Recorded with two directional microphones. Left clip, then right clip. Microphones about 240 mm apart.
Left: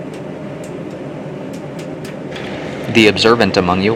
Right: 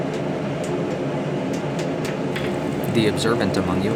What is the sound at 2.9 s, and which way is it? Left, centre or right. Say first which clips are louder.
Speech: left 11 dB; right.